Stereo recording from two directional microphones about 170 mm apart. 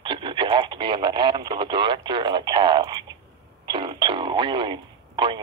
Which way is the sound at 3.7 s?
30° right (ahead or behind).